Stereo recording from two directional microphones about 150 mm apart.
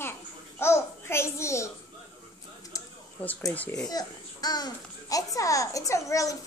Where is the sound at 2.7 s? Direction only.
20° left (ahead or behind).